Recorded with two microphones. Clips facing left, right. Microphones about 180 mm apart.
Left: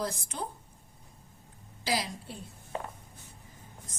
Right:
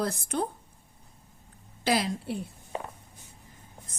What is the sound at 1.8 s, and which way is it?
Speech, 65° right (ahead or behind).